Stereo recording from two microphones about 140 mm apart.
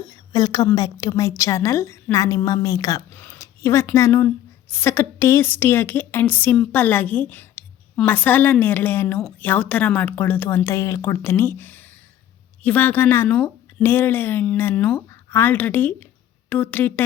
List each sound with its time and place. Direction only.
0.1 s a woman's voice: 30° left (ahead or behind)
3.2 s a sound: 15° left (ahead or behind)
3.9 s a woman's voice: 20° left (ahead or behind)